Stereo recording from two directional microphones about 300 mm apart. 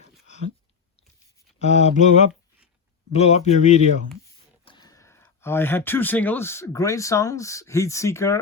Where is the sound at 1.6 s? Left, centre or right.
Left.